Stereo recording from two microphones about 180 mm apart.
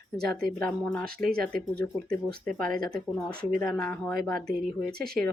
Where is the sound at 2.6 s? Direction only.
5° left (ahead or behind).